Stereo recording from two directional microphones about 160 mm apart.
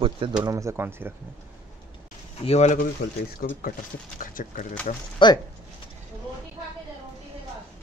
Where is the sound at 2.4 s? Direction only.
40° left (ahead or behind).